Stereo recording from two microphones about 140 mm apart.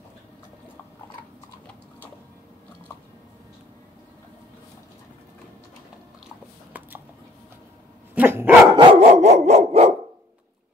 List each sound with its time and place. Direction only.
8.1 s dog: 15° right (ahead or behind)
8.7 s dog: 45° right (ahead or behind)